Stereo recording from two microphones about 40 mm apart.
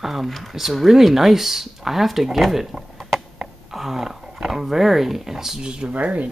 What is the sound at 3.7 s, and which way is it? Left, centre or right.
Speech, centre.